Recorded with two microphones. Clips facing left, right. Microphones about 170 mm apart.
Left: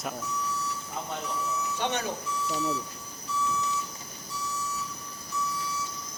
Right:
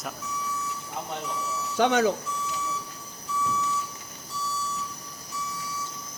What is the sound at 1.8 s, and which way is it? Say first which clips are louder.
Speech: right 11 dB; 90° right.